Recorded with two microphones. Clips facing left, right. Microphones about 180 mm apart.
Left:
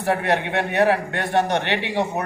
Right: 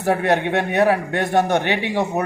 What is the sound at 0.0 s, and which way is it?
A man's voice, 45° right (ahead or behind).